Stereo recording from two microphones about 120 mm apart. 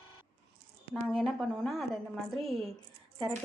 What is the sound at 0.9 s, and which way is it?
A woman's voice, 5° left (ahead or behind).